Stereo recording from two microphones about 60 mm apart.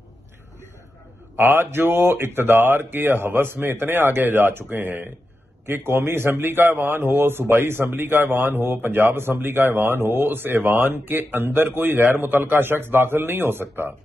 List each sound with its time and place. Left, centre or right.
1.3 s a man's voice: right